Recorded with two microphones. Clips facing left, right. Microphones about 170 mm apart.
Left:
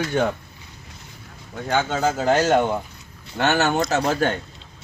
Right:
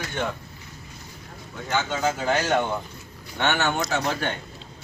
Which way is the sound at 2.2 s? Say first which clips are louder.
Left 7 dB; 40° left (ahead or behind).